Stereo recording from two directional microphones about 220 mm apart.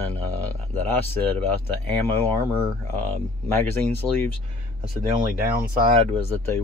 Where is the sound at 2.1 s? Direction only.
10° left (ahead or behind).